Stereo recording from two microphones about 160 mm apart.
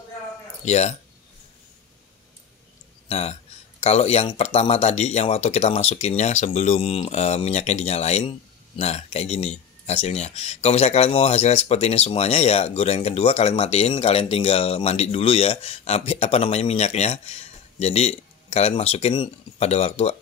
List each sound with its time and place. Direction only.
0.7 s speech: 45° left (ahead or behind)
3.1 s speech: 40° left (ahead or behind)